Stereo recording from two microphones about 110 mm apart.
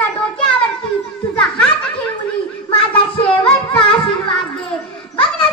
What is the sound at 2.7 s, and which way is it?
Music, 55° left (ahead or behind).